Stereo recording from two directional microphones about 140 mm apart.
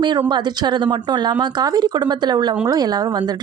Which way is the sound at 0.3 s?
30° right (ahead or behind).